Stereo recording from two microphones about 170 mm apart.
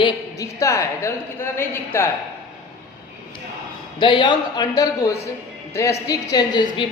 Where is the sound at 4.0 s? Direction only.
30° left (ahead or behind).